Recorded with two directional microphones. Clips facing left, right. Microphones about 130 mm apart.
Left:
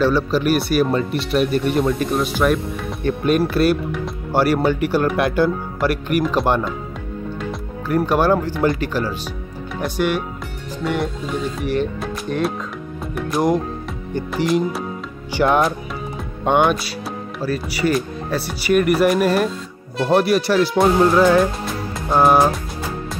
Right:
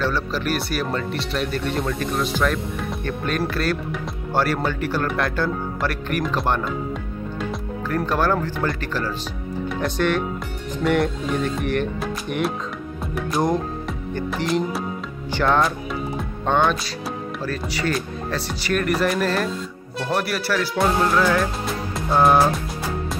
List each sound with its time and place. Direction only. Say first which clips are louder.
0.0 s speech: left 7 dB; 15° left (ahead or behind)
7.9 s speech: left 5 dB; 15° left (ahead or behind)
13.1 s music: left 3 dB; 5° left (ahead or behind)
14.3 s speech: left 4 dB; centre (ahead or behind)
15.3 s music: left 3 dB; 15° left (ahead or behind)
16.4 s speech: left 4 dB; 15° left (ahead or behind)
22.1 s speech: left 2 dB; 10° left (ahead or behind)